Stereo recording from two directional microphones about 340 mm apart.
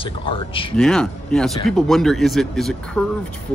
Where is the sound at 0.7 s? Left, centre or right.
Centre.